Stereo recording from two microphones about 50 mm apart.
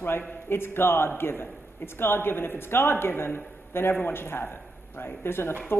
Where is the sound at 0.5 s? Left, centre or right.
Left.